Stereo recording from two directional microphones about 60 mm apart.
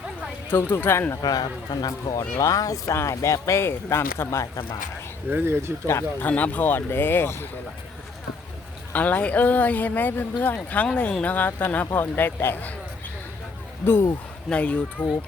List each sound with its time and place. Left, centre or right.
0.5 s speech: left
1.2 s speech: left
2.4 s speech: left
3.0 s speech: left
5.3 s speech: right
6.1 s speech: left
8.9 s speech: left
13.8 s speech: left
14.5 s speech: left